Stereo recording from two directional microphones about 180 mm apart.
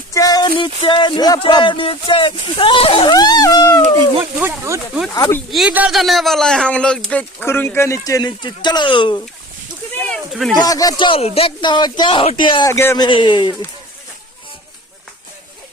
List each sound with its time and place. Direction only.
0.1 s a sound: 20° left (ahead or behind)
0.8 s speech: 25° left (ahead or behind)
4.2 s speech: 10° right (ahead or behind)
5.1 s speech: 20° left (ahead or behind)
5.5 s a man's voice: 5° right (ahead or behind); by 9.2 s 25° left (ahead or behind)
10.0 s a sound: 5° left (ahead or behind)
10.6 s speech: 20° left (ahead or behind)
12.7 s a man's voice: 15° left (ahead or behind)
13.1 s speech: 25° left (ahead or behind)